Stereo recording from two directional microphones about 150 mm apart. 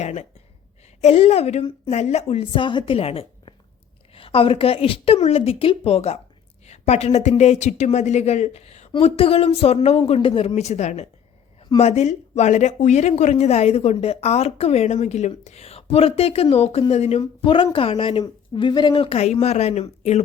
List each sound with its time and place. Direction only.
0.0 s speech: 50° left (ahead or behind)